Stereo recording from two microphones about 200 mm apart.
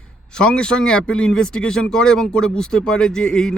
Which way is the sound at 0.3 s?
5° left (ahead or behind).